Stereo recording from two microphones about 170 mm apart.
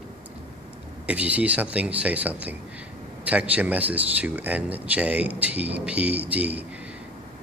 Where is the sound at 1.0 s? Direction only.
10° right (ahead or behind).